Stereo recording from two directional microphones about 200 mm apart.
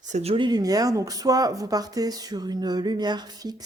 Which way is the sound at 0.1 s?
30° right (ahead or behind).